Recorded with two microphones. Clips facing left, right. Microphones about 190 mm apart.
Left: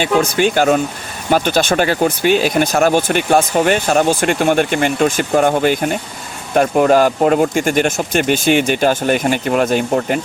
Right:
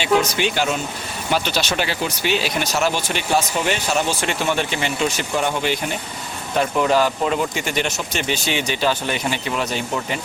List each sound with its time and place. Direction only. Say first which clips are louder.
0.0 s speech: left 4 dB; 50° left (ahead or behind)